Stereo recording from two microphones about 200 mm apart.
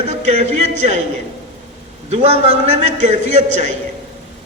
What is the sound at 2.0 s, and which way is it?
A man's voice, 30° right (ahead or behind).